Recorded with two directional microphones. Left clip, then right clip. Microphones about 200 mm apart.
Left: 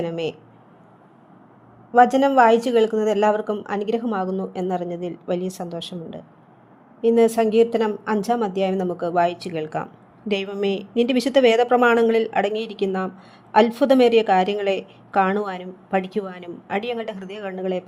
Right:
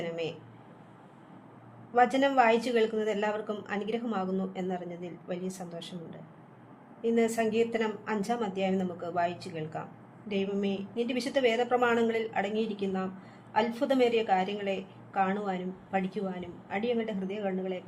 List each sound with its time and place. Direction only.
0.0 s a woman's voice: 35° left (ahead or behind)
1.9 s a woman's voice: 30° left (ahead or behind); by 17.8 s 45° left (ahead or behind)